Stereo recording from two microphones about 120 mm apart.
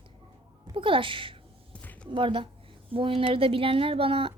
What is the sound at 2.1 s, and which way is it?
A woman's voice, 45° right (ahead or behind).